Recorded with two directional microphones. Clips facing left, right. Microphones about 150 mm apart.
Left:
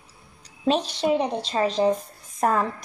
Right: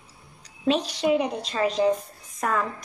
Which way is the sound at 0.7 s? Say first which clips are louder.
Even; 30° left (ahead or behind).